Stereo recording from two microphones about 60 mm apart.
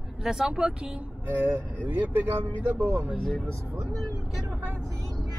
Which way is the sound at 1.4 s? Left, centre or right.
Right.